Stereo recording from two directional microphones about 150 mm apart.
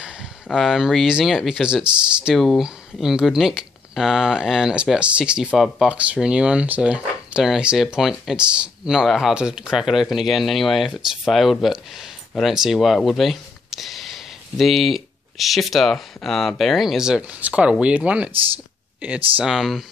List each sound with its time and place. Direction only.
0.5 s speech: centre (ahead or behind)